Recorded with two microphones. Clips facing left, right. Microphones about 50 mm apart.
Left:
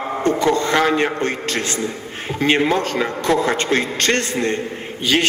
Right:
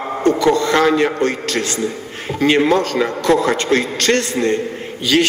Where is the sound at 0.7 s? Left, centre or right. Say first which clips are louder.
Right 3 dB; left.